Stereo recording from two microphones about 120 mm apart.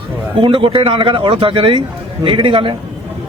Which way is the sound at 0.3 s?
40° right (ahead or behind).